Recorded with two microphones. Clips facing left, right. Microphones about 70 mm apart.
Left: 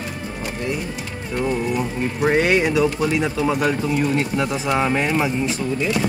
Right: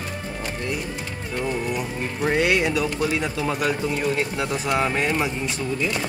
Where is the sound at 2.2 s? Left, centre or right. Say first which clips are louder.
Left 3 dB; left.